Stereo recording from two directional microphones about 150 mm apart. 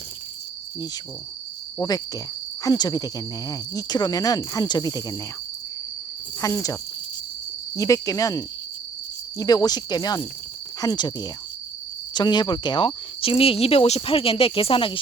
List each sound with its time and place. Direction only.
1.8 s speech: 25° left (ahead or behind)
6.4 s speech: 20° left (ahead or behind)
7.8 s speech: 20° left (ahead or behind)